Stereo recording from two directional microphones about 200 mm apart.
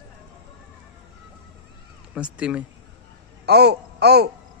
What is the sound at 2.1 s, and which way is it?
Speech, 5° right (ahead or behind).